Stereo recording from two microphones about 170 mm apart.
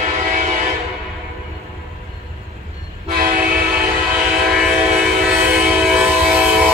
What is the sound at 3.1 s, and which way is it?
Train, 55° right (ahead or behind).